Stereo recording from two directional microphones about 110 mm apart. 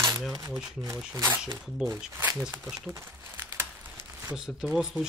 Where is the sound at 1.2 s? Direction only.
25° right (ahead or behind).